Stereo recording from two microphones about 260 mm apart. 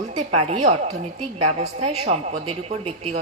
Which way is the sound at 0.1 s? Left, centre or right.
Right.